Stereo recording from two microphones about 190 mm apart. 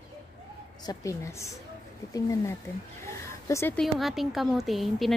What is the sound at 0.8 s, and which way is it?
A woman's voice, 15° left (ahead or behind).